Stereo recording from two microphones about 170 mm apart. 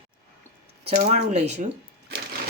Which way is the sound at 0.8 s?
40° right (ahead or behind).